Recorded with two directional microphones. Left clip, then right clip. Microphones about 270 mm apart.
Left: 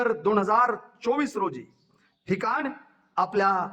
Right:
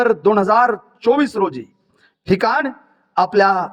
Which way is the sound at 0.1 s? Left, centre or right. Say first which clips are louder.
Right 9 dB; right.